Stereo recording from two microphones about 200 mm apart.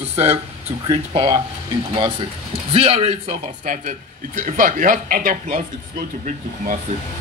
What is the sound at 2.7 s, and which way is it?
Speech, 30° right (ahead or behind).